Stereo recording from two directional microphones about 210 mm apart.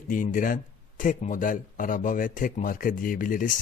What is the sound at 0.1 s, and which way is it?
Speech, 40° left (ahead or behind).